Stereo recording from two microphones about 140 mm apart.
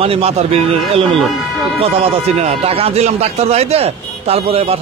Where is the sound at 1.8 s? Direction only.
50° right (ahead or behind).